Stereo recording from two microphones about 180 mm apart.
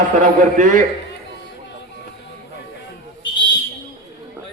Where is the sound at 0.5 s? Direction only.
45° right (ahead or behind).